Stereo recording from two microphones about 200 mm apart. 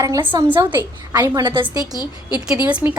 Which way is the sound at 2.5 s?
5° right (ahead or behind).